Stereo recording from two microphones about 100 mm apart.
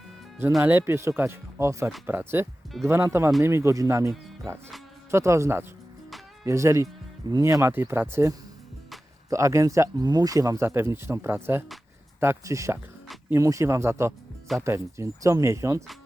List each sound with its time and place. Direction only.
0.6 s speech: 20° right (ahead or behind)